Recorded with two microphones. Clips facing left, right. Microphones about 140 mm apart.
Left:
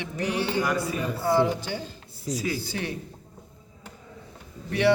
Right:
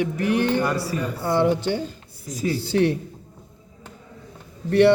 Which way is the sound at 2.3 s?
35° right (ahead or behind).